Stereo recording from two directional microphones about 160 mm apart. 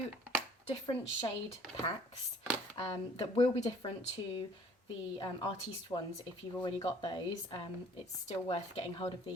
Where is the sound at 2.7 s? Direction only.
30° left (ahead or behind).